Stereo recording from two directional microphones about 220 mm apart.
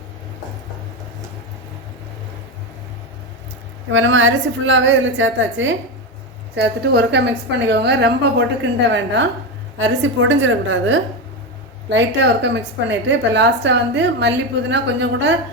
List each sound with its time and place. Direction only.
3.8 s a woman's voice: 60° right (ahead or behind)